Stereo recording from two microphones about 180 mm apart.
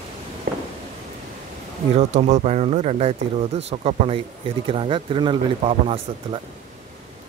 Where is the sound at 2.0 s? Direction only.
40° right (ahead or behind).